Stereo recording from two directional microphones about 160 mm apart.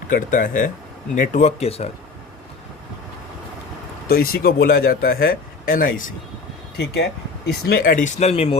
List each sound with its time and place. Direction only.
0.1 s speech: 55° left (ahead or behind); by 1.9 s 40° left (ahead or behind)
4.1 s speech: 70° left (ahead or behind)
7.4 s speech: 80° left; by 8.5 s 40° left (ahead or behind)